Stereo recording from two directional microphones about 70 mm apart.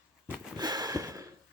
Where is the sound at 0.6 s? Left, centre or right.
Right.